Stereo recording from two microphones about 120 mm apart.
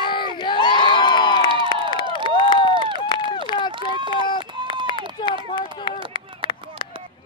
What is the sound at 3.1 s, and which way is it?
Run, 40° left (ahead or behind).